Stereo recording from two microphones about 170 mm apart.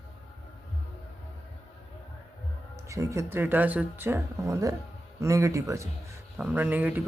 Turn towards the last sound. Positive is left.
turn(degrees=-10)  # may be behind; listen again after turning